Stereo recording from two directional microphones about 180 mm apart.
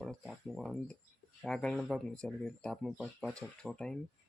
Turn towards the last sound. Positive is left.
turn(degrees=5)  # may be behind; listen again after turning